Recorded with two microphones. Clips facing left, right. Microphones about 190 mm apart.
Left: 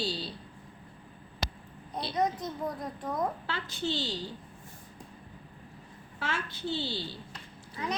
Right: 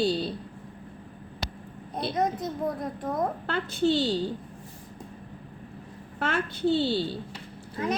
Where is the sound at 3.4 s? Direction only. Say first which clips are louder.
Right 9 dB; 55° right (ahead or behind).